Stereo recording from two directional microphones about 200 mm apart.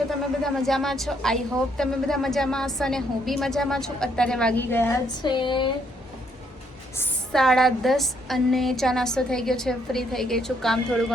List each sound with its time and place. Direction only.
0.4 s a woman's voice: centre (ahead or behind)
5.2 s speech: 25° left (ahead or behind)
6.9 s a woman's voice: 5° left (ahead or behind)